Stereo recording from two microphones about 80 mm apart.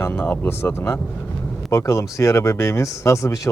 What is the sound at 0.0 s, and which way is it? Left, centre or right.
Speech, left.